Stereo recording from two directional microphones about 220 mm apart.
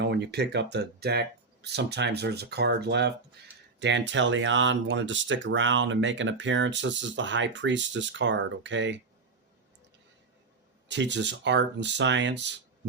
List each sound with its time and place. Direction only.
0.0 s speech: 50° right (ahead or behind)
10.8 s speech: 55° right (ahead or behind)